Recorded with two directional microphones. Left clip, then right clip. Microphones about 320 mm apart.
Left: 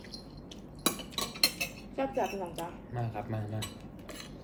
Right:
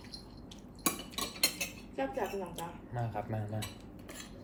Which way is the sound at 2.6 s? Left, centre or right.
Centre.